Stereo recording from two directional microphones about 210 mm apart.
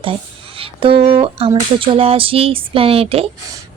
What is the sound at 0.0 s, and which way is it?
Speech, 25° right (ahead or behind).